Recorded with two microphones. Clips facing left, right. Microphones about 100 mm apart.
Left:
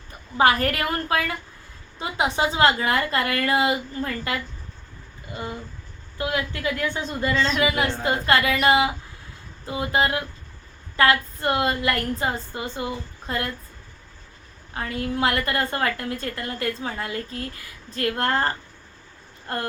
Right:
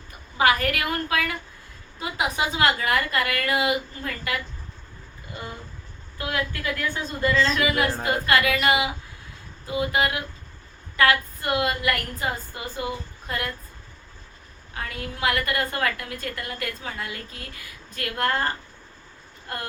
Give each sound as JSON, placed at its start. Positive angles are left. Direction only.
{"t": 0.3, "sound": "a woman's voice", "side_deg": 35}
{"t": 6.1, "sound": "a woman's voice", "side_deg": 25}
{"t": 14.7, "sound": "a woman's voice", "side_deg": 30}